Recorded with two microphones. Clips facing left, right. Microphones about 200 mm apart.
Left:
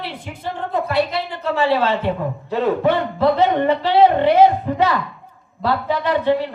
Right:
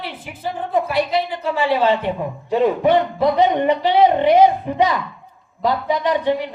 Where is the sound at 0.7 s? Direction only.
15° right (ahead or behind).